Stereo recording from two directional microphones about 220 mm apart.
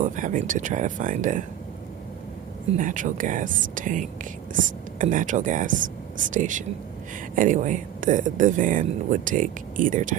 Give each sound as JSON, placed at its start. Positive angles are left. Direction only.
{"t": 0.0, "sound": "speech", "side_deg": -35}
{"t": 2.7, "sound": "speech", "side_deg": -35}